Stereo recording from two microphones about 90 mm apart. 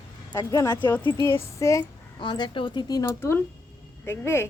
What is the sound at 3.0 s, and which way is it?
Speech, 30° left (ahead or behind).